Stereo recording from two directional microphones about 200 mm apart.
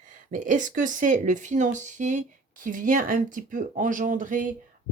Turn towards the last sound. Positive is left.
turn(degrees=-40)  # may be behind; listen again after turning